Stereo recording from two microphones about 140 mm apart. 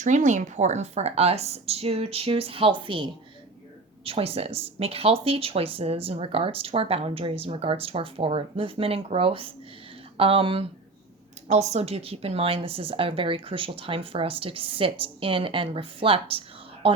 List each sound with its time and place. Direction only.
0.0 s speech: 60° right (ahead or behind); by 10.7 s 40° right (ahead or behind)
11.4 s speech: 50° right (ahead or behind)